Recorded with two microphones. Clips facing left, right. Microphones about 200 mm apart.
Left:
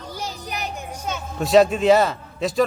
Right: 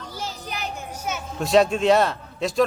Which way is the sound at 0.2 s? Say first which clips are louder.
Left 1 dB; 15° left (ahead or behind).